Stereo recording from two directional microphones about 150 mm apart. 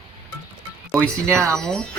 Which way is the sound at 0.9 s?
Centre (ahead or behind).